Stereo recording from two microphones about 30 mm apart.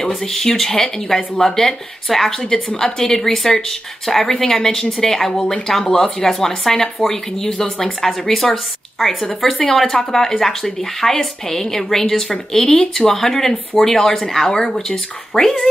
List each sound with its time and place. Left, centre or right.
0.1 s a woman's voice: centre
2.5 s a woman's voice: left
3.0 s a woman's voice: centre
4.3 s a woman's voice: left
15.3 s a woman's voice: left